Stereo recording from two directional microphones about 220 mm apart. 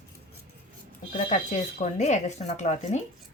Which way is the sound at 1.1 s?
35° left (ahead or behind).